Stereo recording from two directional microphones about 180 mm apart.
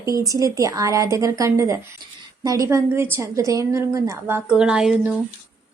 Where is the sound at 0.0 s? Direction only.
20° right (ahead or behind).